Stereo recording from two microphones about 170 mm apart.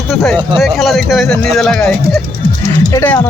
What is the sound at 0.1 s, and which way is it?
Speech, 5° left (ahead or behind).